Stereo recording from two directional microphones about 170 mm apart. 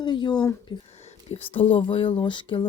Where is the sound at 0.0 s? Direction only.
25° left (ahead or behind).